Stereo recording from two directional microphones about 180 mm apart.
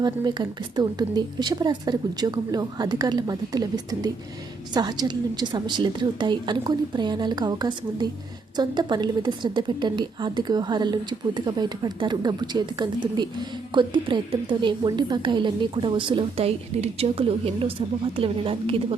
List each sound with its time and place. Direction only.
0.0 s a woman's voice: 25° right (ahead or behind)